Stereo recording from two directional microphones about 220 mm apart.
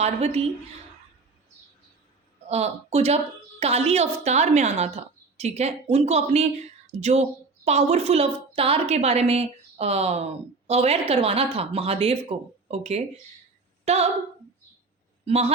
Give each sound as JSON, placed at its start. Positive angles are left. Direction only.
{"t": 0.0, "sound": "speech", "side_deg": -30}
{"t": 2.5, "sound": "speech", "side_deg": -30}
{"t": 15.2, "sound": "speech", "side_deg": -30}